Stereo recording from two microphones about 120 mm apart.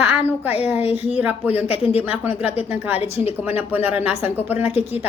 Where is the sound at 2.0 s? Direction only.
10° right (ahead or behind).